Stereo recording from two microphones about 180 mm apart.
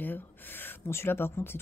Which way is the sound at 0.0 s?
10° left (ahead or behind).